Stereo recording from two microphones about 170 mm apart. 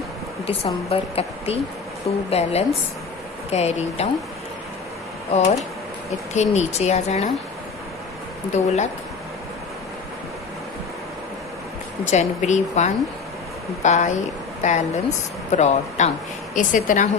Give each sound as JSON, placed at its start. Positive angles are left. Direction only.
{"t": 0.4, "sound": "a woman's voice", "side_deg": 35}
{"t": 6.3, "sound": "a woman's voice", "side_deg": 40}
{"t": 8.5, "sound": "speech", "side_deg": 40}
{"t": 12.0, "sound": "speech", "side_deg": 45}